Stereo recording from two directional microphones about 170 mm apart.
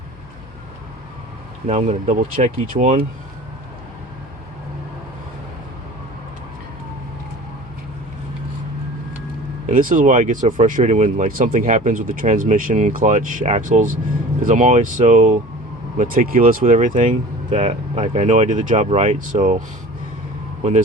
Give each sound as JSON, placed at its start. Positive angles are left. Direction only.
{"t": 1.6, "sound": "speech", "side_deg": -45}
{"t": 9.6, "sound": "speech", "side_deg": -50}